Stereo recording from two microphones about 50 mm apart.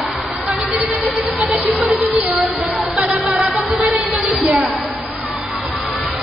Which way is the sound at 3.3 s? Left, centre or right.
Centre.